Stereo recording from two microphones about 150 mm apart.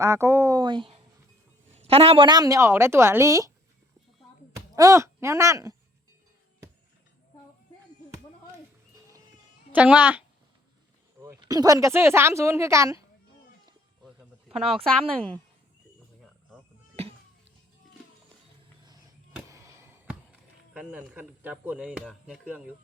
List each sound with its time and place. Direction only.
0.0 s a woman's voice: 20° right (ahead or behind)
4.5 s speech: 20° right (ahead or behind)
9.7 s speech: 10° right (ahead or behind)
11.3 s a woman's voice: 25° right (ahead or behind)
15.0 s a woman's voice: 40° right (ahead or behind)
17.0 s music: 40° right (ahead or behind)
19.5 s a sound: 20° right (ahead or behind)
20.7 s speech: 10° right (ahead or behind)